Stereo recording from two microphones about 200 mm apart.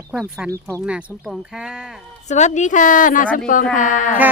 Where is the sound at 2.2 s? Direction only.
35° left (ahead or behind).